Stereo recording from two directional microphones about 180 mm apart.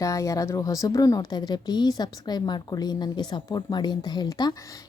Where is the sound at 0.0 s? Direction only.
20° left (ahead or behind).